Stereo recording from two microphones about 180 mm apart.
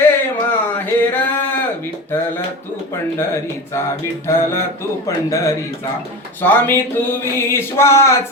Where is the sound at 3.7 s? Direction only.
15° left (ahead or behind).